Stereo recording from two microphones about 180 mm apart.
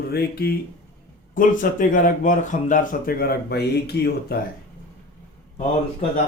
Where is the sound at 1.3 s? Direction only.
50° left (ahead or behind).